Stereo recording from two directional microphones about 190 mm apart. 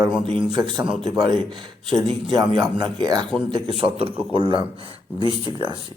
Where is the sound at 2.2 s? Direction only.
25° right (ahead or behind).